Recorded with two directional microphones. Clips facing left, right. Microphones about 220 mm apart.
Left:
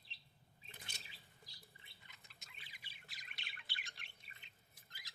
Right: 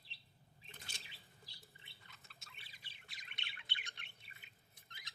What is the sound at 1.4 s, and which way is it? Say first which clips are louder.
Bird: right 1 dB; 30° right (ahead or behind).